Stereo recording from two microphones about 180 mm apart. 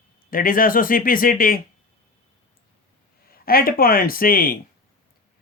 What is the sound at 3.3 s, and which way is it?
Speech, 55° left (ahead or behind).